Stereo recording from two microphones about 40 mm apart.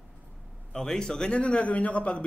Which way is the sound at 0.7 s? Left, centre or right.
Centre.